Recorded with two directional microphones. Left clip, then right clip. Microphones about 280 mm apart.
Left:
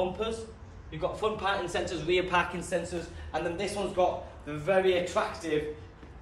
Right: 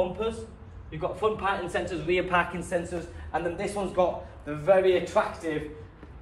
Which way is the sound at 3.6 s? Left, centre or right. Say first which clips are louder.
Right 1 dB; centre.